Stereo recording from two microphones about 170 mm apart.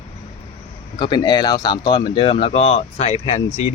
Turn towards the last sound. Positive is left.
turn(degrees=35)  # may be behind; listen again after turning